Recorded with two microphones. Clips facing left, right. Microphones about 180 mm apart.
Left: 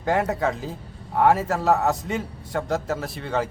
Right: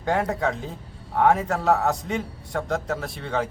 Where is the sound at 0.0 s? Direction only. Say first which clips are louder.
Left 1 dB; centre (ahead or behind).